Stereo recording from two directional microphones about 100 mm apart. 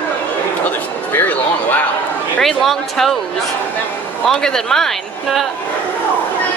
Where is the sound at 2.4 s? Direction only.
5° left (ahead or behind).